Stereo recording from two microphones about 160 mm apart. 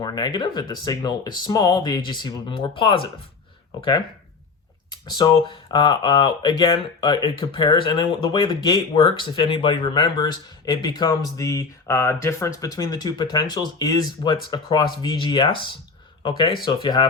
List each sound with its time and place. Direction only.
0.0 s speech: 25° left (ahead or behind)